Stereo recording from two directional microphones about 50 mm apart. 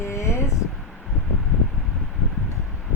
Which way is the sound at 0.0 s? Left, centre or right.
Left.